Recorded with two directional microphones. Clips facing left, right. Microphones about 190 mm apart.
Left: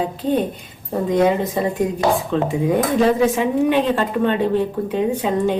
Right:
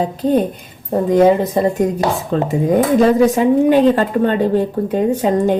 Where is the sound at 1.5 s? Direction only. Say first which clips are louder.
Right 5 dB; 40° right (ahead or behind).